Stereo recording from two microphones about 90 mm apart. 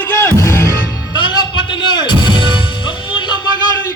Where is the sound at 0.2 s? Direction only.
35° left (ahead or behind).